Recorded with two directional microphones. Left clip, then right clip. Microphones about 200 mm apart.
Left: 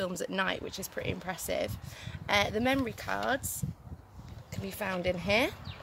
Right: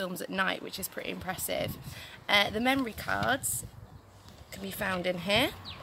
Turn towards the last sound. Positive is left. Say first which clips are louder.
# right 1 dB
turn(degrees=25)  # may be behind; listen again after turning